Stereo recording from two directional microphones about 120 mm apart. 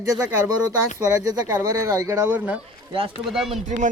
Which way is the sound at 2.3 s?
10° right (ahead or behind).